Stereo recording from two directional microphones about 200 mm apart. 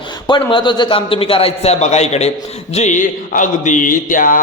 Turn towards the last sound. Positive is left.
turn(degrees=40)  # may be behind; listen again after turning